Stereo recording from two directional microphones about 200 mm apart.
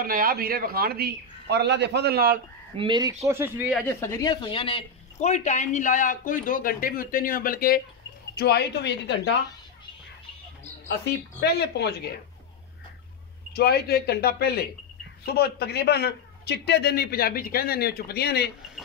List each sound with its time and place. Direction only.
0.0 s a man's voice: 45° right (ahead or behind)
2.8 s speech: 20° right (ahead or behind)
3.3 s speech: 10° right (ahead or behind)
3.8 s speech: 15° left (ahead or behind); by 9.3 s 60° left (ahead or behind)
11.4 s speech: 55° left (ahead or behind)
13.5 s a man's voice: 50° left (ahead or behind)